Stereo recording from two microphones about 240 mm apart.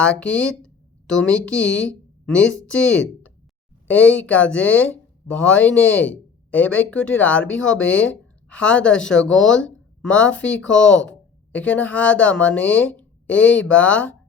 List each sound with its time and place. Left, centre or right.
0.0 s speech: centre